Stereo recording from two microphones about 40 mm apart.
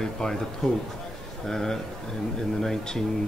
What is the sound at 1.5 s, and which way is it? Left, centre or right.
A man's voice, centre.